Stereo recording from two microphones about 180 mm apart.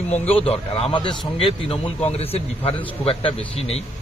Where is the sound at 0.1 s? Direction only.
35° left (ahead or behind).